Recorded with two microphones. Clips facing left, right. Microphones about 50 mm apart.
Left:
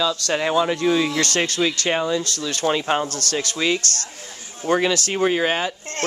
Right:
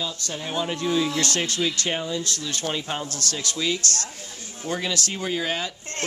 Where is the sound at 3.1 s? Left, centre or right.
Left.